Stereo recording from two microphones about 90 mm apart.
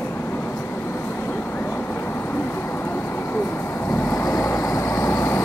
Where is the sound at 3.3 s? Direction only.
25° left (ahead or behind).